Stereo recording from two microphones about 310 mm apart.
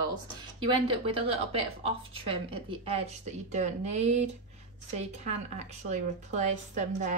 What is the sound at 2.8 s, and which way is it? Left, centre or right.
A woman's voice, centre.